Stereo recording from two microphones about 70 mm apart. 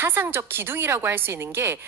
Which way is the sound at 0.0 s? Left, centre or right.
Right.